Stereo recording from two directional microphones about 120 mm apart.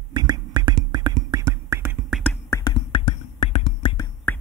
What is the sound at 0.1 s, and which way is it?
Beatboxing, 35° right (ahead or behind).